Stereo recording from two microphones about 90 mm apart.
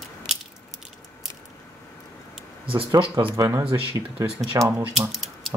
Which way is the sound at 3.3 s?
35° right (ahead or behind).